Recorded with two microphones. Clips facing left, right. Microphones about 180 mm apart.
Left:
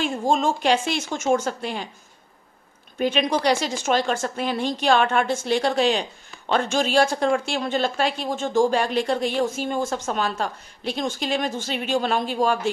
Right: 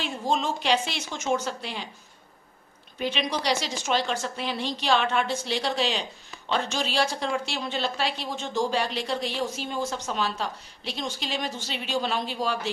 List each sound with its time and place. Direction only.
0.0 s a woman's voice: 50° left (ahead or behind)
3.0 s a woman's voice: 50° left (ahead or behind)